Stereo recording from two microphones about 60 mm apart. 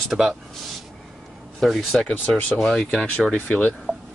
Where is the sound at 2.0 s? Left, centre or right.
Left.